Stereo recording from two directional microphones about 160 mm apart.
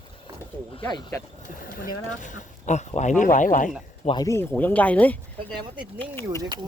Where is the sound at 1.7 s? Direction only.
55° left (ahead or behind).